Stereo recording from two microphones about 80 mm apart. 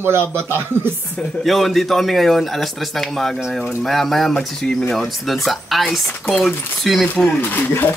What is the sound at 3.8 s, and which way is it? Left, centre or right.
Speech, centre.